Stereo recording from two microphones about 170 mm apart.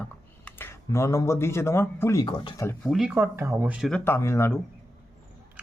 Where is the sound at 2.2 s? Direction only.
30° left (ahead or behind).